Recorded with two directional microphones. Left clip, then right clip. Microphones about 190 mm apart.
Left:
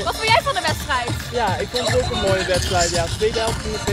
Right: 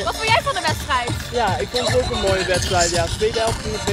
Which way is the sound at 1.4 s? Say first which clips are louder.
Right 1 dB; 20° right (ahead or behind).